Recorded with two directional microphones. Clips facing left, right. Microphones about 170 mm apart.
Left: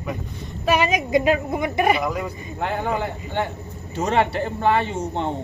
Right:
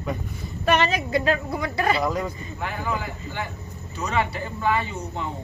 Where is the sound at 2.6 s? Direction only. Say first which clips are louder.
Left 6 dB; 60° left (ahead or behind).